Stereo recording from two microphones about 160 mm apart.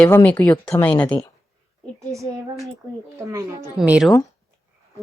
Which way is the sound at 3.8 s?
5° right (ahead or behind).